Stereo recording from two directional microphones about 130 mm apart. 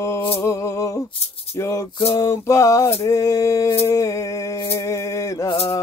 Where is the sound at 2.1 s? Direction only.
20° left (ahead or behind).